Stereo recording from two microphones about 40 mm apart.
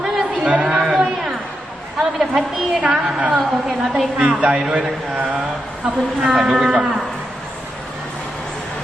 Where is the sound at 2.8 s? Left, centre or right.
Right.